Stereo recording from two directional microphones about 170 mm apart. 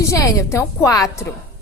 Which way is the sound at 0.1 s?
20° left (ahead or behind).